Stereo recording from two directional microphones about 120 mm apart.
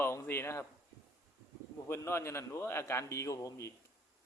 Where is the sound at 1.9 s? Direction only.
20° left (ahead or behind).